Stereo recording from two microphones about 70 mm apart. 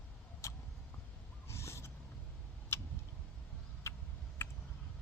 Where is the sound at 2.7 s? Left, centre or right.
Left.